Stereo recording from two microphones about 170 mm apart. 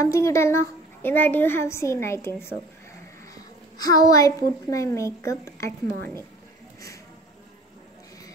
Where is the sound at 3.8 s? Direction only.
20° left (ahead or behind).